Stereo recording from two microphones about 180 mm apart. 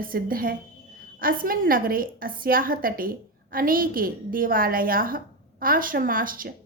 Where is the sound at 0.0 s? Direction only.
55° right (ahead or behind).